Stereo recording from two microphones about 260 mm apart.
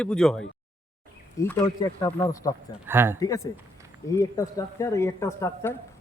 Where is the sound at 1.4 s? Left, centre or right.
Centre.